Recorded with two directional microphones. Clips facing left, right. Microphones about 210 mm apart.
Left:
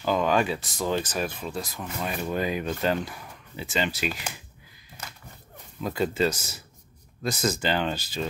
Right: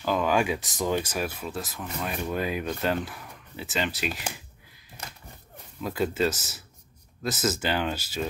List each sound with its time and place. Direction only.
0.0 s speech: 5° right (ahead or behind)
5.8 s speech: centre (ahead or behind)